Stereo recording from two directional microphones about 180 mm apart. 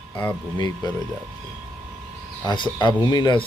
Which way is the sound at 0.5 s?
25° left (ahead or behind).